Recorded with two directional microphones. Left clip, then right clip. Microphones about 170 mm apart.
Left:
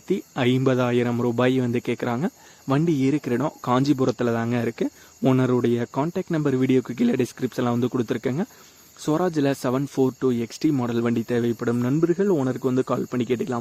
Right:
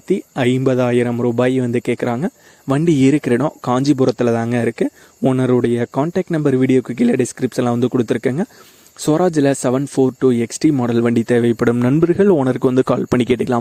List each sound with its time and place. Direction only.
0.1 s speech: 30° right (ahead or behind); by 13.6 s 60° right (ahead or behind)